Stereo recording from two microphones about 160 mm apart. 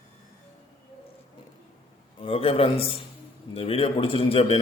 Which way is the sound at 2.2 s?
35° left (ahead or behind).